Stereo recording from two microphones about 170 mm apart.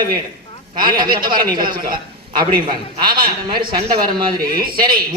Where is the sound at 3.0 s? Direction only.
60° right (ahead or behind).